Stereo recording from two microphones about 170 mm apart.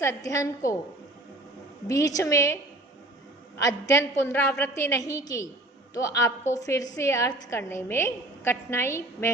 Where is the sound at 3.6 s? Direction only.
15° left (ahead or behind).